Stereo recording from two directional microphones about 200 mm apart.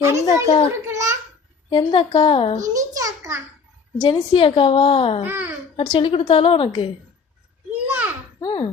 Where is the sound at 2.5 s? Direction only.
15° right (ahead or behind).